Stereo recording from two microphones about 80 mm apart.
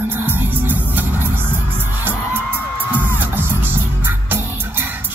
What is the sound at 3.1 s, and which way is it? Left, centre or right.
Music, right.